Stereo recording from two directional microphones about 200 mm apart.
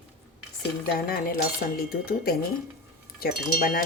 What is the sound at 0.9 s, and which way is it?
A woman's voice, 50° left (ahead or behind).